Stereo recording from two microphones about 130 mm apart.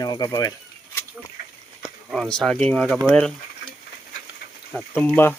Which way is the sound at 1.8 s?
Centre (ahead or behind).